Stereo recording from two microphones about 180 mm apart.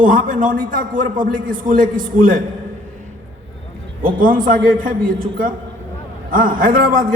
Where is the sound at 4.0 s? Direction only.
50° right (ahead or behind).